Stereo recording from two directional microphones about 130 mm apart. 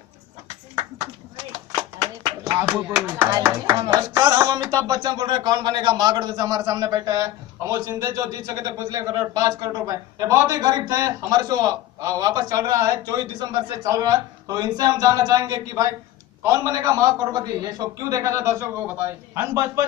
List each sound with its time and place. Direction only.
2.6 s speech: 10° right (ahead or behind)
3.7 s music: 35° right (ahead or behind)
4.6 s speech: 35° right (ahead or behind)